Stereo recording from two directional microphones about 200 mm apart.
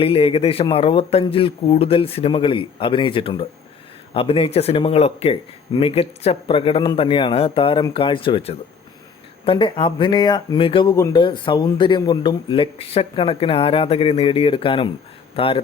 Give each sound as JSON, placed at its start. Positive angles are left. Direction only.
{"t": 0.0, "sound": "speech", "side_deg": 25}